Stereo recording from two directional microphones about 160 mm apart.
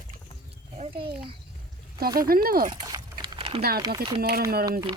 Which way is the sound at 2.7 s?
25° right (ahead or behind).